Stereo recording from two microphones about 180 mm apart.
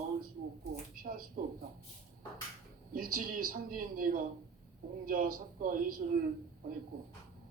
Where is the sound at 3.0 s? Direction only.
55° right (ahead or behind).